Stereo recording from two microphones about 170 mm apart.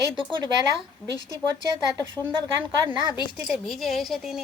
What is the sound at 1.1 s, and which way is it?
Speech, 20° left (ahead or behind).